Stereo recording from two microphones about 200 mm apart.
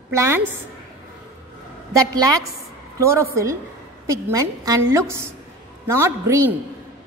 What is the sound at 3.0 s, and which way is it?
A woman's voice, 15° right (ahead or behind).